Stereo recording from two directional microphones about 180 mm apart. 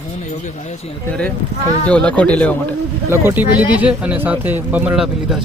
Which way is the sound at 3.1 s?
15° right (ahead or behind).